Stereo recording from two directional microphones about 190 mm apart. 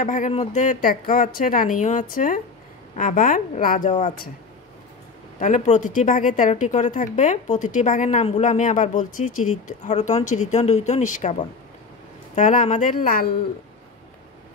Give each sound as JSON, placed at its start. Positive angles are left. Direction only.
{"t": 0.0, "sound": "a woman's voice", "side_deg": 40}
{"t": 5.4, "sound": "a woman's voice", "side_deg": 40}